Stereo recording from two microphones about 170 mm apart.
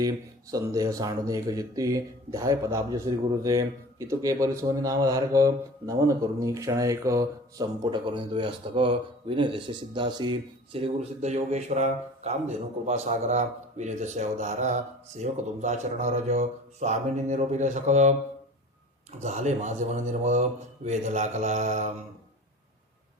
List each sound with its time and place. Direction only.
0.5 s speech: 20° right (ahead or behind); by 18.1 s 45° right (ahead or behind)
19.2 s speech: 45° right (ahead or behind)